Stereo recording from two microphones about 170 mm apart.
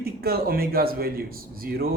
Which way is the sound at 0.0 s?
65° right (ahead or behind).